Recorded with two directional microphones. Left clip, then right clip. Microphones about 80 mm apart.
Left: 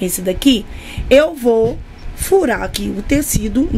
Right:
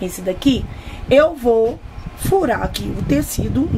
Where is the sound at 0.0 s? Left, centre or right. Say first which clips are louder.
Left 3 dB; left.